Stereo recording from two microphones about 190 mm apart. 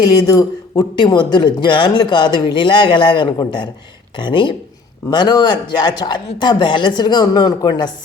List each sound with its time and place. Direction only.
0.3 s speech: 20° left (ahead or behind)